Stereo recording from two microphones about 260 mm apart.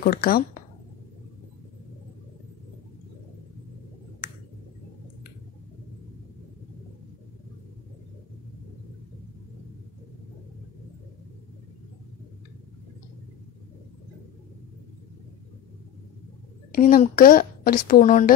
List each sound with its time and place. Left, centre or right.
0.0 s speech: left
16.7 s speech: left